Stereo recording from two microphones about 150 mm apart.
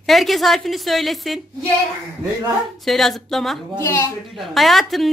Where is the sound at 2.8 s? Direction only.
Centre (ahead or behind).